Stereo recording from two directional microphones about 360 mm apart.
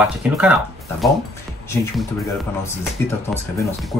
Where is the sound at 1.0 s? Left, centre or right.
Centre.